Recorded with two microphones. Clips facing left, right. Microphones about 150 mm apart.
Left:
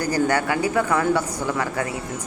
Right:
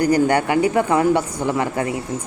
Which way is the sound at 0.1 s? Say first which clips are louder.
Right 5 dB; 20° right (ahead or behind).